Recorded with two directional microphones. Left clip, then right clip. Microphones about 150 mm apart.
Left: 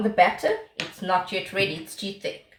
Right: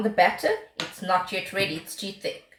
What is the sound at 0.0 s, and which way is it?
Speech, 10° left (ahead or behind).